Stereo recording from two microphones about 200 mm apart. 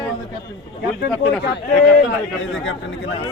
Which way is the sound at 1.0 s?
60° left (ahead or behind).